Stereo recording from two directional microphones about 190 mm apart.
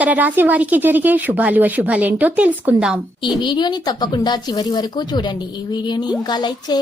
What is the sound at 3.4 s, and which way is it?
Speech, 25° left (ahead or behind).